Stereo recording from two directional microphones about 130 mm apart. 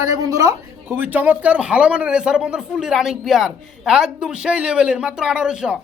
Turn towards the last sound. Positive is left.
turn(degrees=-5)  # may be behind; listen again after turning